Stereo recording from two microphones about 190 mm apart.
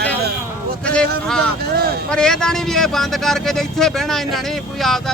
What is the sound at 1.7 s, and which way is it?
Speech, 55° right (ahead or behind).